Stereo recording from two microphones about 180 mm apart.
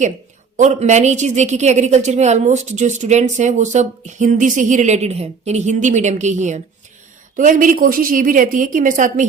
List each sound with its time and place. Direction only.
0.5 s a woman's voice: 40° right (ahead or behind)